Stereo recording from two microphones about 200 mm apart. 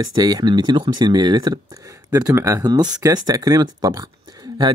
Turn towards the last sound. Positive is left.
turn(degrees=-20)  # may be behind; listen again after turning